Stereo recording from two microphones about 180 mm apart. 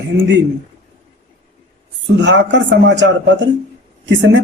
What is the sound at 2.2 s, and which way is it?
A man's voice, 80° right.